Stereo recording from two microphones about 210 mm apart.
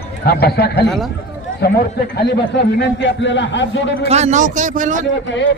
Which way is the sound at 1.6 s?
50° left (ahead or behind).